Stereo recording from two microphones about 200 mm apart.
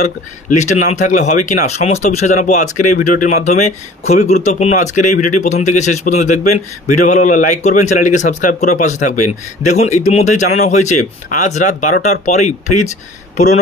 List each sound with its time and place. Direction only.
0.0 s speech: 35° left (ahead or behind)